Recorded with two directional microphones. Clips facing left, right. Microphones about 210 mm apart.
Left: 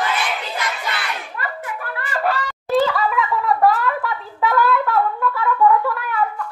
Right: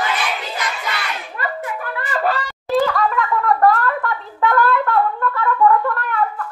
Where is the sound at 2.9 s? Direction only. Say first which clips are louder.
Right 1 dB; centre (ahead or behind).